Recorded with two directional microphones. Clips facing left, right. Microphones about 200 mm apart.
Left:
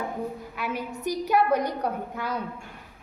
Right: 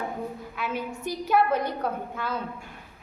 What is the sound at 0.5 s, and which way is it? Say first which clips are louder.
A woman's voice: even; 15° left (ahead or behind).